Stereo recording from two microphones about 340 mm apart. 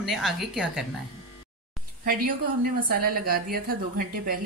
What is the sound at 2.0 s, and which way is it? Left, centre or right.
A woman's voice, right.